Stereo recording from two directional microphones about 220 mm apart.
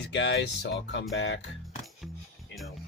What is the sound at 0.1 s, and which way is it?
Speech, 55° left (ahead or behind).